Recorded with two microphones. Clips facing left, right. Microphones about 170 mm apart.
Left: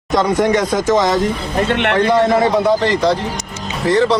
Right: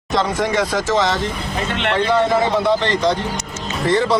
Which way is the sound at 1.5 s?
60° left (ahead or behind).